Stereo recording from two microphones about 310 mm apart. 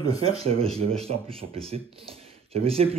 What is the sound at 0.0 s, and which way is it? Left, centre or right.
Speech, centre.